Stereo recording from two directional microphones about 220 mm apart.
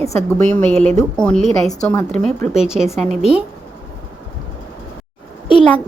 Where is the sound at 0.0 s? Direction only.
10° left (ahead or behind).